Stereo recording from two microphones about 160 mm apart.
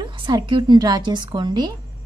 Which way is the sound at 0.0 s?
30° right (ahead or behind).